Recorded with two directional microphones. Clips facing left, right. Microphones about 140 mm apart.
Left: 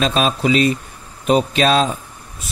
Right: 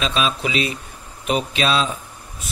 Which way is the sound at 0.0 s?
45° left (ahead or behind).